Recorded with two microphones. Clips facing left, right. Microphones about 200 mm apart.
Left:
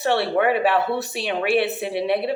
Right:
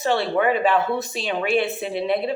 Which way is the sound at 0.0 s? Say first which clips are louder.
Left 1 dB; 70° left (ahead or behind).